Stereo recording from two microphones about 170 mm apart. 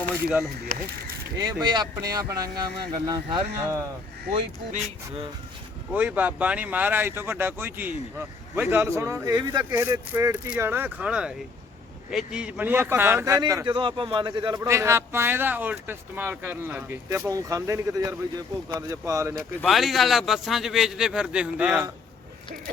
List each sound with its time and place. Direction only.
0.7 s speech: 55° right (ahead or behind)
1.6 s speech: 25° right (ahead or behind)
4.7 s speech: 35° right (ahead or behind)
5.9 s a man's voice: 10° right (ahead or behind)
19.6 s a man's voice: centre (ahead or behind)